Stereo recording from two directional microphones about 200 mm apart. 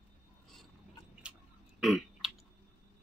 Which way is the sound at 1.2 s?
5° right (ahead or behind).